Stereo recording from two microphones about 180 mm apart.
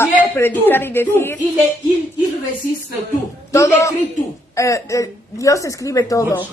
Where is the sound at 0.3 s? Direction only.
10° left (ahead or behind).